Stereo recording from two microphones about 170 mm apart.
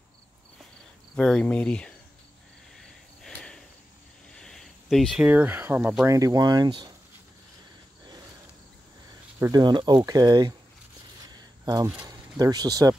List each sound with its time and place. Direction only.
1.1 s speech: 5° left (ahead or behind)
2.8 s a sound: 5° left (ahead or behind)
4.3 s speech: 5° left (ahead or behind)
6.1 s speech: 20° right (ahead or behind)
9.4 s speech: 25° right (ahead or behind)
11.3 s a sound: 20° right (ahead or behind)
12.1 s speech: 25° right (ahead or behind)